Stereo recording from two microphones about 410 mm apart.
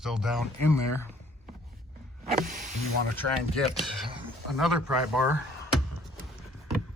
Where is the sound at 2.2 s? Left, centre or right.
Centre.